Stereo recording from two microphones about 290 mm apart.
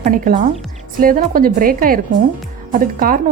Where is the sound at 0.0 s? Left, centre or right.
Right.